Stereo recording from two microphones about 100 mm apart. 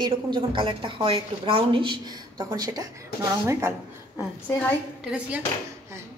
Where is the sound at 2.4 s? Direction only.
40° right (ahead or behind).